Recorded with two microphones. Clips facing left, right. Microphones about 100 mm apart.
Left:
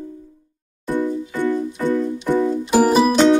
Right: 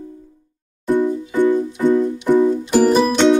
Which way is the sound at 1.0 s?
20° right (ahead or behind).